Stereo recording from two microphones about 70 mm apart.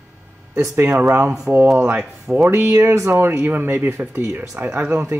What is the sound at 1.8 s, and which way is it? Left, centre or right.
Speech, centre.